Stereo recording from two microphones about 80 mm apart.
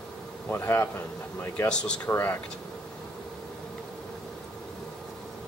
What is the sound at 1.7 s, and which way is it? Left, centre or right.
Speech, centre.